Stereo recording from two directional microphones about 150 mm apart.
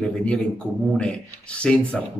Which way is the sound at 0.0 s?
5° left (ahead or behind).